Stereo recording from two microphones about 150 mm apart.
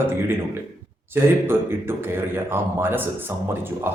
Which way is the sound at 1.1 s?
15° right (ahead or behind).